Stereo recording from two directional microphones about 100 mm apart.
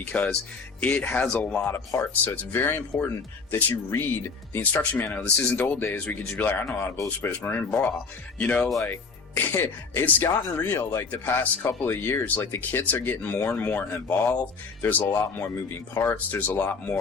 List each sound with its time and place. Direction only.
0.0 s speech: 15° left (ahead or behind)
1.6 s speech: 25° left (ahead or behind)
6.9 s speech: 30° left (ahead or behind)
7.3 s speech: 20° left (ahead or behind)